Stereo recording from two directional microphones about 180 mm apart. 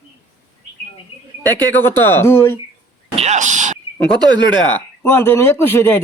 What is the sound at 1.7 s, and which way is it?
Speech, 10° left (ahead or behind).